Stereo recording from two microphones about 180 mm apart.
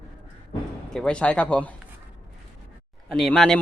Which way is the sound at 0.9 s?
5° left (ahead or behind).